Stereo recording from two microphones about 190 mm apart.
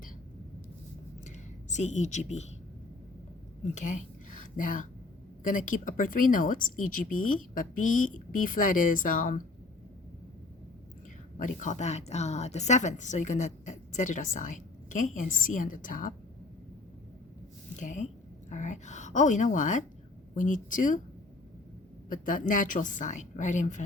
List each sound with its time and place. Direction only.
1.7 s a woman's voice: 40° left (ahead or behind)
3.6 s a woman's voice: 40° left (ahead or behind)
11.3 s a woman's voice: 40° left (ahead or behind)
17.7 s a woman's voice: 40° left (ahead or behind)
22.1 s a woman's voice: 45° left (ahead or behind)